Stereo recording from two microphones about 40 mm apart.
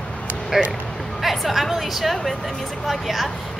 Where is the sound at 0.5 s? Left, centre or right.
Centre.